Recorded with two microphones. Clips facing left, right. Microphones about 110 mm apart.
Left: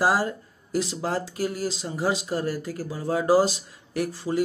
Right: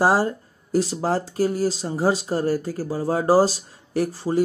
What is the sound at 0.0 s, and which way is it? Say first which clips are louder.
Speech: right 4 dB; 30° right (ahead or behind).